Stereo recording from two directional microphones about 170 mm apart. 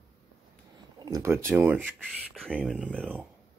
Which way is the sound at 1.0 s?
20° right (ahead or behind).